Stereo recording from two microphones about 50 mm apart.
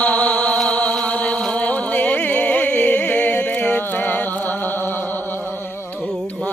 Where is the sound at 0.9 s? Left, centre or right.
Left.